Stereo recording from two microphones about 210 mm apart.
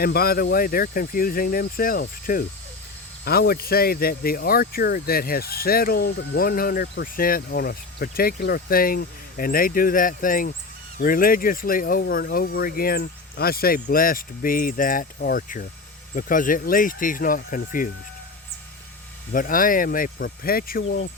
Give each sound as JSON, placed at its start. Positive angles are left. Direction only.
{"t": 0.0, "sound": "speech", "side_deg": 45}
{"t": 19.3, "sound": "speech", "side_deg": 40}